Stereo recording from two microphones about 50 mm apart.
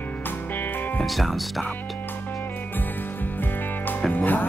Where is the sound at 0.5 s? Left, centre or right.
Left.